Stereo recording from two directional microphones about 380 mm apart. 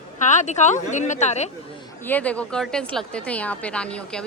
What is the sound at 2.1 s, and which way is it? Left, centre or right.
A woman's voice, centre.